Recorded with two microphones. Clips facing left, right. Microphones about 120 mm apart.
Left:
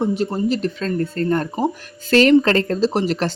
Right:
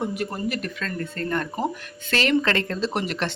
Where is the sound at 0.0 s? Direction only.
30° left (ahead or behind).